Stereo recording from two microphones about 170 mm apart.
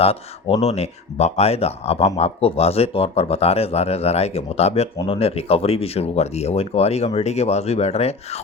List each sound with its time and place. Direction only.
0.0 s speech: 35° left (ahead or behind)